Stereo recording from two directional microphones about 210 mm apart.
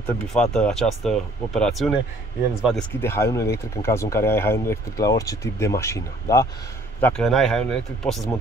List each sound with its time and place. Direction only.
0.0 s speech: centre (ahead or behind)
3.0 s speech: 15° left (ahead or behind)
7.0 s speech: 5° left (ahead or behind)